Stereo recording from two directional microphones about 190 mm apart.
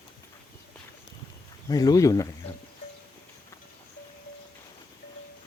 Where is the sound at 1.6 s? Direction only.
20° left (ahead or behind).